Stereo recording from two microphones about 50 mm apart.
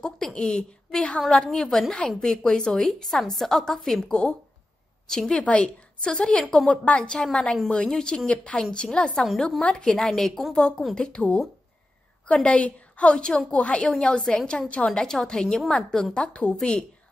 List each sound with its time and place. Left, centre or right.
0.0 s a woman's voice: centre
5.4 s a woman's voice: left
7.0 s a woman's voice: centre
9.9 s a woman's voice: centre
11.0 s a woman's voice: centre
12.4 s a woman's voice: left